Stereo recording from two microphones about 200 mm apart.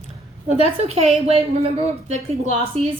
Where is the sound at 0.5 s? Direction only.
30° right (ahead or behind).